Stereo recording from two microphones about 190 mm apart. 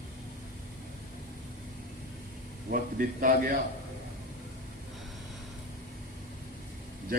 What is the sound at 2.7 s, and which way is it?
Speech, 45° right (ahead or behind).